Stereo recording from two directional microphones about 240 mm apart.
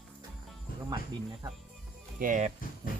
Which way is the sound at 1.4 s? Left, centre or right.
Centre.